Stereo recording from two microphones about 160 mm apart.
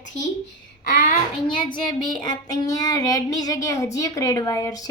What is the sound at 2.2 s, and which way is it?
Child singing, 25° left (ahead or behind).